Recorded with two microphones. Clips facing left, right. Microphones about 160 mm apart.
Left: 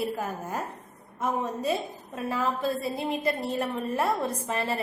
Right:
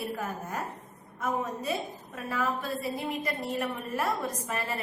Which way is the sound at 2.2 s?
30° left (ahead or behind).